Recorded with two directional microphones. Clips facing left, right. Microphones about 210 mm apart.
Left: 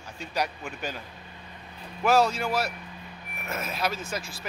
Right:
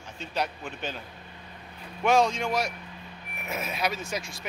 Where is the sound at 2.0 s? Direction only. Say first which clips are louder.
Even; 5° left (ahead or behind).